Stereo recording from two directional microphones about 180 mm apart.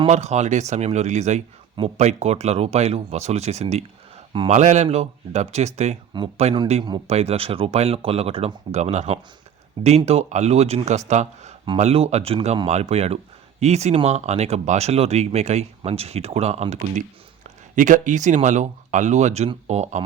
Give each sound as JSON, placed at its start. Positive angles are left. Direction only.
{"t": 0.1, "sound": "speech", "side_deg": -40}
{"t": 4.5, "sound": "speech", "side_deg": -40}